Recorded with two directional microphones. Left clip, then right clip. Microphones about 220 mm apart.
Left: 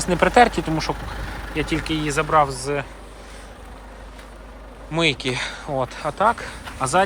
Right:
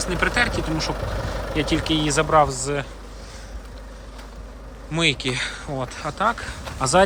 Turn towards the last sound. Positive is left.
turn(degrees=-10)  # may be behind; listen again after turning